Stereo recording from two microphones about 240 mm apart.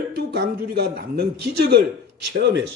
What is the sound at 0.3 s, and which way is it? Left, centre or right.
Speech, right.